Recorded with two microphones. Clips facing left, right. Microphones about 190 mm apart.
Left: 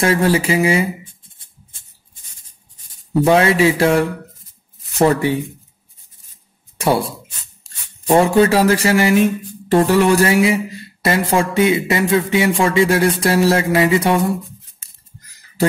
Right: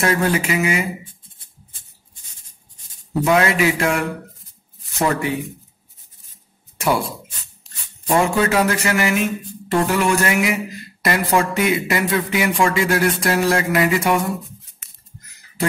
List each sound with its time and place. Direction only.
0.0 s speech: 30° left (ahead or behind)
3.3 s speech: 30° left (ahead or behind)
6.8 s speech: 30° left (ahead or behind)